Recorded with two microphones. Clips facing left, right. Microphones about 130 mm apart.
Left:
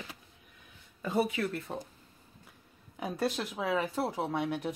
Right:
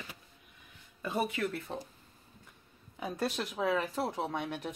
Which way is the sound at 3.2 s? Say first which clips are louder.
Even; centre (ahead or behind).